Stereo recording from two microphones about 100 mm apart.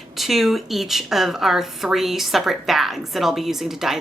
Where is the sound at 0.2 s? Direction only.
Centre (ahead or behind).